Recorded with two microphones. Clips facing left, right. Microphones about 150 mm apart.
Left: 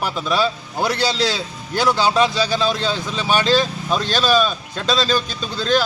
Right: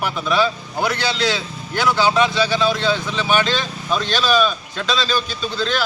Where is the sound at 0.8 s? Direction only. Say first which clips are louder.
Left 1 dB; 35° left (ahead or behind).